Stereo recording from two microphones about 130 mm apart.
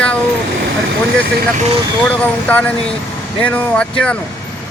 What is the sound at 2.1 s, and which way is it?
Speech, 10° left (ahead or behind).